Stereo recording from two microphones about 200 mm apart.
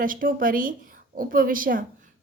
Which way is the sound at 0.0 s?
45° right (ahead or behind).